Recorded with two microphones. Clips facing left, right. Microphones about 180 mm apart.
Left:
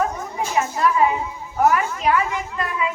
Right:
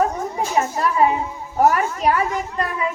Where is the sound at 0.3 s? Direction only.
35° right (ahead or behind).